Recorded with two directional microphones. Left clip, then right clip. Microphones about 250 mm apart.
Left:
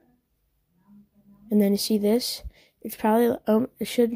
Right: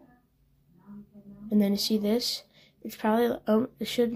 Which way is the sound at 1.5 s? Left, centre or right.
Left.